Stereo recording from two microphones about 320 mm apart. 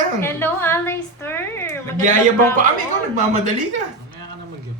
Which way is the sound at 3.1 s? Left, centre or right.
Right.